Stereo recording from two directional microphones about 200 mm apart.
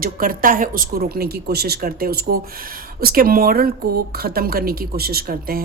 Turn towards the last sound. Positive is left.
turn(degrees=-45)  # may be behind; listen again after turning